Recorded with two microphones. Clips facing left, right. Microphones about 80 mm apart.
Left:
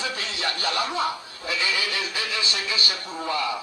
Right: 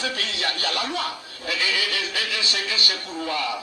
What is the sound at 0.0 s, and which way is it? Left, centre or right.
A man's voice, left.